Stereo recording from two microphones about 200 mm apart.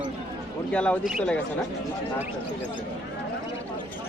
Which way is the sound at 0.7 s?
5° left (ahead or behind).